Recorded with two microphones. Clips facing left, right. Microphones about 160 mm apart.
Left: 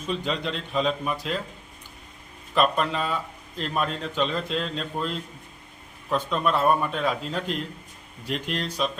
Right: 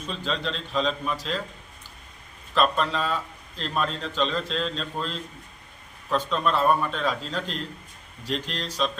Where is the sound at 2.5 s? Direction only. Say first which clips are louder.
Left 1 dB; 10° left (ahead or behind).